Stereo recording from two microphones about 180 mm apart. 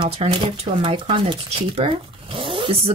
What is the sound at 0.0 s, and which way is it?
Speech, 30° right (ahead or behind).